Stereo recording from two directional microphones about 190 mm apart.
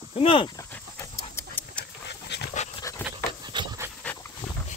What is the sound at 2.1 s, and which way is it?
Dog, 60° left (ahead or behind).